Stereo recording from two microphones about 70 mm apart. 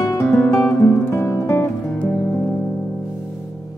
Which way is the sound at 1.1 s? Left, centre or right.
Left.